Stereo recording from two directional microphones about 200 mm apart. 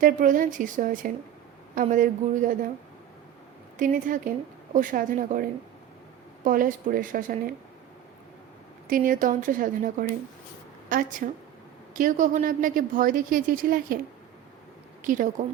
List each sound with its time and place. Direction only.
0.0 s a woman's voice: 40° right (ahead or behind)
3.8 s a woman's voice: 45° right (ahead or behind)
8.9 s a woman's voice: 45° right (ahead or behind)
15.0 s a woman's voice: 40° right (ahead or behind)